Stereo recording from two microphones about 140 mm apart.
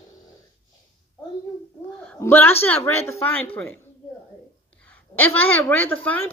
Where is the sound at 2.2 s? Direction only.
15° left (ahead or behind).